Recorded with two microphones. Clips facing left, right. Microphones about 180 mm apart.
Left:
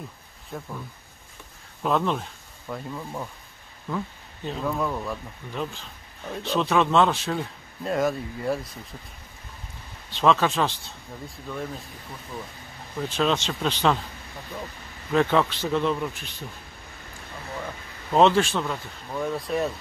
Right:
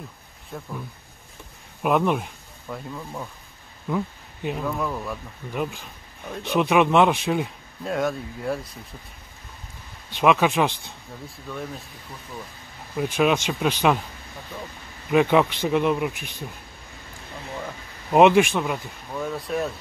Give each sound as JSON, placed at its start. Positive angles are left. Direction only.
{"t": 0.5, "sound": "speech", "side_deg": 0}
{"t": 1.8, "sound": "a man's voice", "side_deg": -15}
{"t": 2.7, "sound": "speech", "side_deg": 5}
{"t": 3.9, "sound": "speech", "side_deg": -15}
{"t": 4.6, "sound": "speech", "side_deg": 0}
{"t": 5.5, "sound": "a man's voice", "side_deg": -10}
{"t": 7.8, "sound": "speech", "side_deg": 0}
{"t": 10.1, "sound": "a man's voice", "side_deg": -15}
{"t": 11.2, "sound": "speech", "side_deg": 0}
{"t": 12.9, "sound": "a man's voice", "side_deg": -10}
{"t": 15.0, "sound": "a man's voice", "side_deg": -15}
{"t": 18.1, "sound": "a man's voice", "side_deg": -15}
{"t": 19.1, "sound": "speech", "side_deg": 0}